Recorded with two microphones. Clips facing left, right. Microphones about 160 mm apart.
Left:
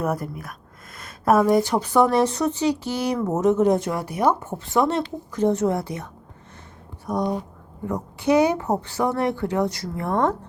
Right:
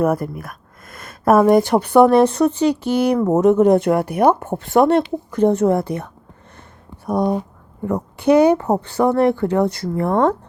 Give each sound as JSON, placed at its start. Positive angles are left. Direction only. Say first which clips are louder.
{"t": 0.0, "sound": "speech", "louder": "right 7 dB", "side_deg": -55}